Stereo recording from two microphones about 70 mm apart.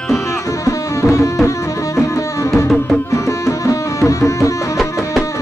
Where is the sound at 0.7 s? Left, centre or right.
Left.